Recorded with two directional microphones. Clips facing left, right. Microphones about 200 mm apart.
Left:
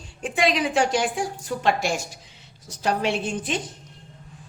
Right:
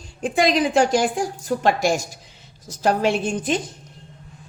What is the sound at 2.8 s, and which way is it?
Speech, 45° right (ahead or behind).